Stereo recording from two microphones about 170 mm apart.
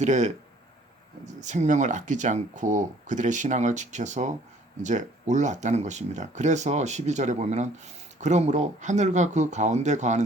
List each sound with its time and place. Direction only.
0.0 s speech: 45° right (ahead or behind)